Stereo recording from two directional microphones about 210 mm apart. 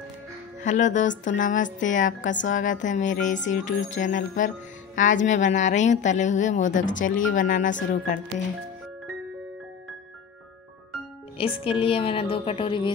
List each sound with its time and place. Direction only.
0.7 s speech: 35° left (ahead or behind)
11.3 s a woman's voice: 25° left (ahead or behind)